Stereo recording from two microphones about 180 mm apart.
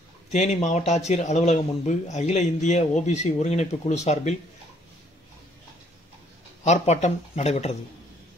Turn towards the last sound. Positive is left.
turn(degrees=35)  # may be behind; listen again after turning